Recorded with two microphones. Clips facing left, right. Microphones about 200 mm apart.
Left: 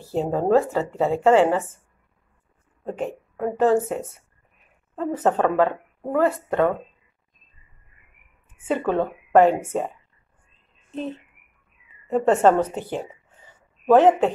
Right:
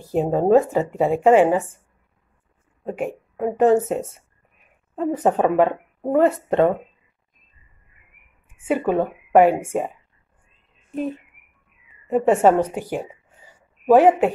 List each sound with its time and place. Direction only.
0.0 s speech: 15° right (ahead or behind)
2.8 s speech: 10° right (ahead or behind)
8.5 s a woman's voice: 10° right (ahead or behind)